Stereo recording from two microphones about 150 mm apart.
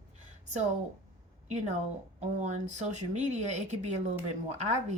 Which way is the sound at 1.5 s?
50° right (ahead or behind).